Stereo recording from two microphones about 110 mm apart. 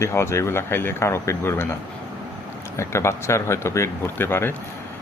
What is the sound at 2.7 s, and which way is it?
Speech, 25° left (ahead or behind).